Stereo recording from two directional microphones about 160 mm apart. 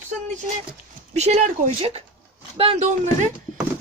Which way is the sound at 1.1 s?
45° right (ahead or behind).